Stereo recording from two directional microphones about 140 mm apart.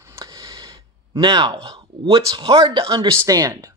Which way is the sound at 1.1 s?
35° right (ahead or behind).